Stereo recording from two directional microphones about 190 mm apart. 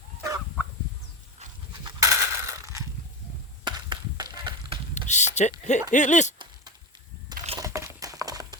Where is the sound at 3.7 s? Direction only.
25° right (ahead or behind).